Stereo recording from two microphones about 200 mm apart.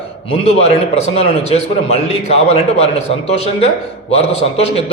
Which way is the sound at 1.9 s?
30° left (ahead or behind).